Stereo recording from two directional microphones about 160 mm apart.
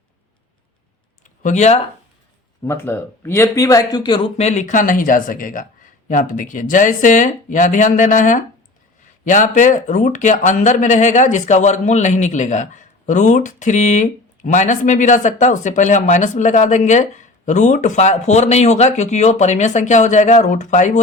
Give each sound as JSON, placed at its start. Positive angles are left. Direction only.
{"t": 1.4, "sound": "speech", "side_deg": 50}
{"t": 2.6, "sound": "speech", "side_deg": 15}
{"t": 4.4, "sound": "speech", "side_deg": 45}